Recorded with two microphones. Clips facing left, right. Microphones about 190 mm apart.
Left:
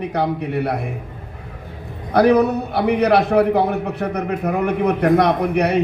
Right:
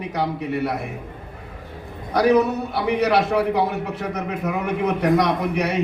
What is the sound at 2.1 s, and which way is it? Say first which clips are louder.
A man's voice: left 3 dB; 60° left (ahead or behind).